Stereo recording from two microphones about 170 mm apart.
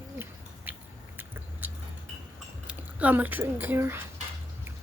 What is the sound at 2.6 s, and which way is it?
Speech, 10° right (ahead or behind).